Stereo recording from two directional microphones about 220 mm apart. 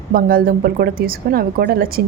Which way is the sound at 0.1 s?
40° right (ahead or behind).